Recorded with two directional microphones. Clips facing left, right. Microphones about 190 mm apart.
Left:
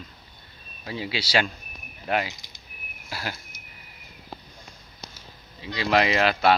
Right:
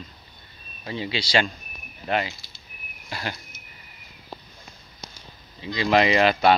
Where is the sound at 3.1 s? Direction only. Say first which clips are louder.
Right 2 dB; 5° left (ahead or behind).